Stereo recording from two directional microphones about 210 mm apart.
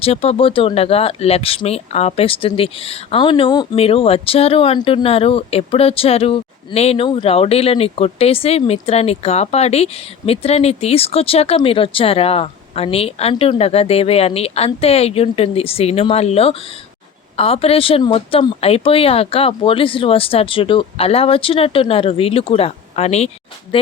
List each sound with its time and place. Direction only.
0.0 s speech: 30° left (ahead or behind)